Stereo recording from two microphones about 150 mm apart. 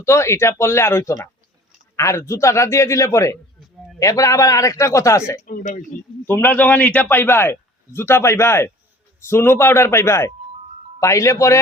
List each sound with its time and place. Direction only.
0.0 s a man's voice: 20° left (ahead or behind)
5.4 s a man's voice: 60° left (ahead or behind)
6.2 s a man's voice: 15° left (ahead or behind)